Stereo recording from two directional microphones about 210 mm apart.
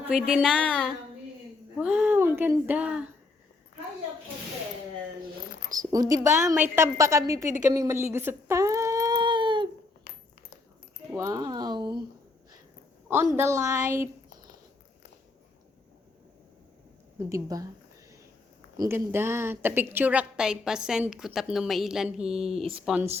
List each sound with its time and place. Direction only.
0.0 s a woman's voice: 5° right (ahead or behind)
5.8 s a woman's voice: 15° right (ahead or behind)
7.6 s a sound: 15° right (ahead or behind)
11.1 s speech: 15° right (ahead or behind)
13.3 s a woman's voice: 15° right (ahead or behind)
17.2 s a woman's voice: 15° right (ahead or behind)
18.8 s a woman's voice: 10° right (ahead or behind)
22.5 s speech: 25° right (ahead or behind)